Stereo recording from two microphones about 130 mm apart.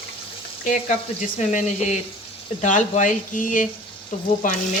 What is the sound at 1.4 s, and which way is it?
Speech, 70° left (ahead or behind).